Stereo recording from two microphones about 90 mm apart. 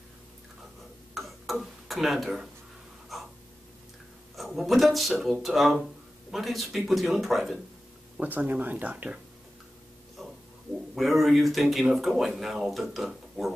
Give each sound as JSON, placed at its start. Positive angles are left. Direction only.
{"t": 1.1, "sound": "tick-tock", "side_deg": 0}
{"t": 3.1, "sound": "a sound", "side_deg": 0}
{"t": 4.4, "sound": "a woman's voice", "side_deg": 0}
{"t": 8.2, "sound": "speech", "side_deg": -20}
{"t": 11.0, "sound": "speech", "side_deg": 0}